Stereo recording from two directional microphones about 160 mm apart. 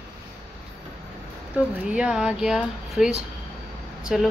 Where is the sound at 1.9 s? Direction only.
5° right (ahead or behind).